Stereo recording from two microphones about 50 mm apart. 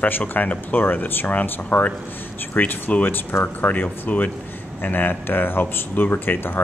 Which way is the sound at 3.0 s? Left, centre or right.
Left.